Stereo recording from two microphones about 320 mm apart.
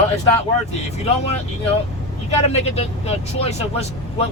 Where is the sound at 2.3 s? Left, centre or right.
Centre.